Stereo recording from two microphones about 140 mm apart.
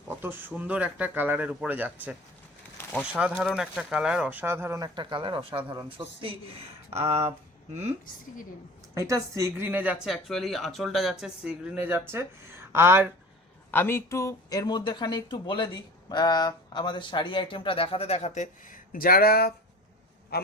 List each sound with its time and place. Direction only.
0.1 s speech: 15° right (ahead or behind)
4.9 s speech: 35° right (ahead or behind)
6.9 s speech: 50° right (ahead or behind)
9.0 s speech: 25° right (ahead or behind)
13.7 s speech: 15° left (ahead or behind); by 19.5 s 90° left